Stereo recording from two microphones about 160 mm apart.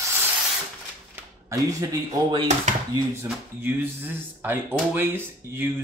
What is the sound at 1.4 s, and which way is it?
Speech, 25° right (ahead or behind).